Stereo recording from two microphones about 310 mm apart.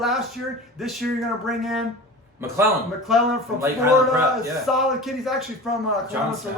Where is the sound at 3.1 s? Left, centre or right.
Centre.